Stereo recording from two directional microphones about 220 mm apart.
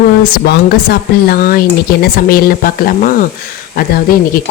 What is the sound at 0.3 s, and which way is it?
Speech, 45° left (ahead or behind).